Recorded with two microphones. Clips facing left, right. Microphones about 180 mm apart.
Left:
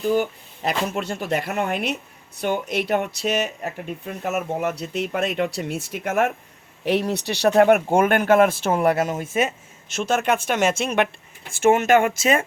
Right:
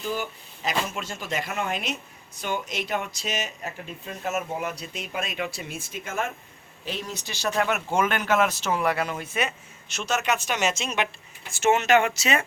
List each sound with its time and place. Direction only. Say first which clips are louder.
0.0 s speech: left 9 dB; 55° left (ahead or behind)